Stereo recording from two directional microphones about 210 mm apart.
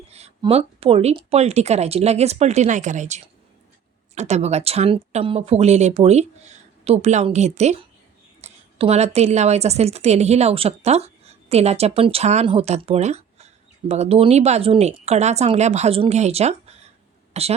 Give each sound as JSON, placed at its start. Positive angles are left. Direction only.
{"t": 0.1, "sound": "a woman's voice", "side_deg": -30}